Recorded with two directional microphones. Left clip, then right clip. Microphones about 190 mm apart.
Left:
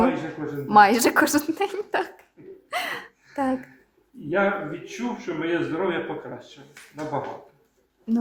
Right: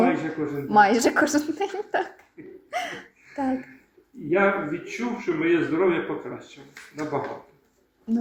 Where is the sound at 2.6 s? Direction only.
25° left (ahead or behind).